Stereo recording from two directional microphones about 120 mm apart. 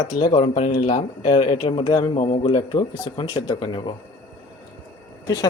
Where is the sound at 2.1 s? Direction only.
50° left (ahead or behind).